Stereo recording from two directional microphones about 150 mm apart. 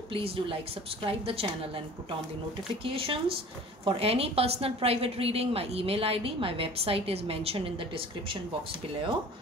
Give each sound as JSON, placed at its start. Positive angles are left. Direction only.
{"t": 0.1, "sound": "a woman's voice", "side_deg": -35}
{"t": 2.8, "sound": "a woman's voice", "side_deg": -35}